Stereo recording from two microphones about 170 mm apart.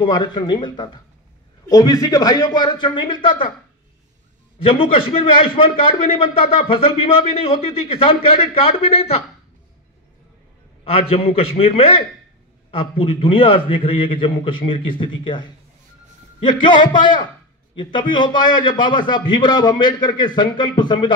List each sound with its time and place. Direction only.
0.0 s a man's voice: 25° left (ahead or behind)
4.6 s a man's voice: 30° left (ahead or behind)
10.8 s a man's voice: 35° left (ahead or behind)